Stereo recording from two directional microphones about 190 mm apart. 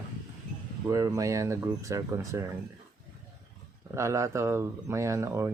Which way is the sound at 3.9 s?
15° right (ahead or behind).